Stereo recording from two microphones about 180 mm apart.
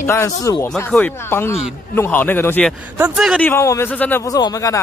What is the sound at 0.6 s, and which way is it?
Speech, 5° left (ahead or behind).